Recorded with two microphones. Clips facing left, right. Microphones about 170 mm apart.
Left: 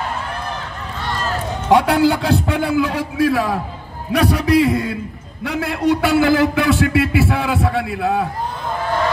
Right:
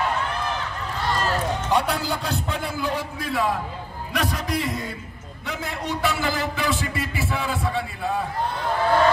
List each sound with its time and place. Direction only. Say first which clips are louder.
1.7 s a man's voice: left 12 dB; 70° left (ahead or behind)